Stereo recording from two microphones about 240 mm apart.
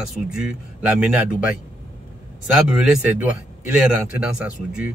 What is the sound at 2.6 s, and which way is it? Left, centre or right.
A man's voice, centre.